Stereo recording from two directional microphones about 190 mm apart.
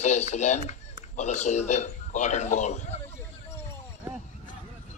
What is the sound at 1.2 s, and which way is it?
Speech, 40° left (ahead or behind).